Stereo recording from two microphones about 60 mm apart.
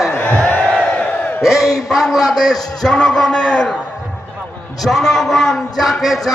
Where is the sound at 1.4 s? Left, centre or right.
Centre.